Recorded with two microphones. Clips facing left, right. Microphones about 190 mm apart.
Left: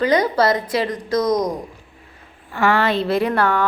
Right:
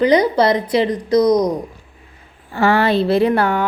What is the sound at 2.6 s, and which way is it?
A woman's voice, 25° right (ahead or behind).